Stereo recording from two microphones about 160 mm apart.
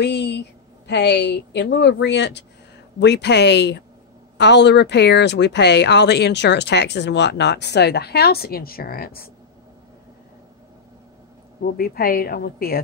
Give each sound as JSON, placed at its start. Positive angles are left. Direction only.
{"t": 0.0, "sound": "a woman's voice", "side_deg": 90}
{"t": 11.6, "sound": "a woman's voice", "side_deg": 70}